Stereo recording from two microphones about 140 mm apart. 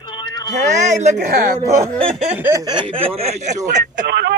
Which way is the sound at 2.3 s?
15° right (ahead or behind).